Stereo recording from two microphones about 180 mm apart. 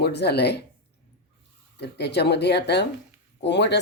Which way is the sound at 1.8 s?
70° left (ahead or behind).